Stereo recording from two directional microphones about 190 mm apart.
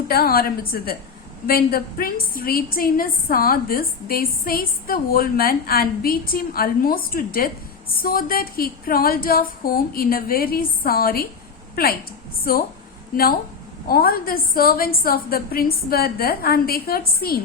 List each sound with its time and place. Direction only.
0.1 s a woman's voice: 55° left (ahead or behind)
13.1 s a woman's voice: 45° left (ahead or behind)